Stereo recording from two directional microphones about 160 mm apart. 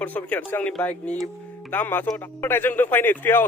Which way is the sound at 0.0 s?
10° left (ahead or behind).